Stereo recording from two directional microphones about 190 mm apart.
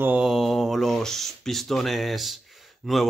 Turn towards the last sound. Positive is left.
turn(degrees=0)  # may be behind; listen again after turning